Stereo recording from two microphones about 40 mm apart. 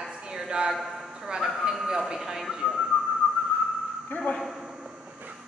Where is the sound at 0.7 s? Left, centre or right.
Centre.